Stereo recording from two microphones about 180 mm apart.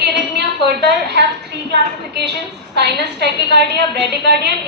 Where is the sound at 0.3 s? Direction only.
65° right (ahead or behind).